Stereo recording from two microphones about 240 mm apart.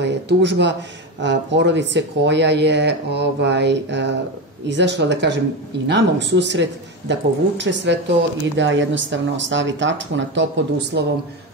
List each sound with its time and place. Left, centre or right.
0.0 s speech: right